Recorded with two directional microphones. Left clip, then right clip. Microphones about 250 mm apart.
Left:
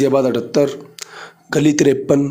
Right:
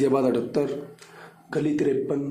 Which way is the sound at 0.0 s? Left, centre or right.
Left.